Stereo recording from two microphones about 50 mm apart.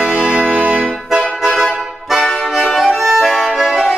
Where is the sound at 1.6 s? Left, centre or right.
Centre.